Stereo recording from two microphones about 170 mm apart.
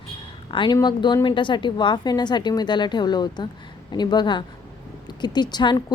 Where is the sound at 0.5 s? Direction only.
25° left (ahead or behind).